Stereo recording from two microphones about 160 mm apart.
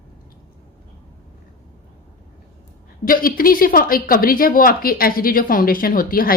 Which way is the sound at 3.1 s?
65° left (ahead or behind).